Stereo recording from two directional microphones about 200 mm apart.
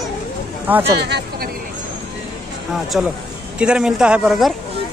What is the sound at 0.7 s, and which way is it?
Speech, 10° right (ahead or behind).